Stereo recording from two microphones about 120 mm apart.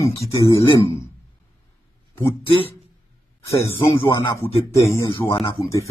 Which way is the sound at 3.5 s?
25° left (ahead or behind).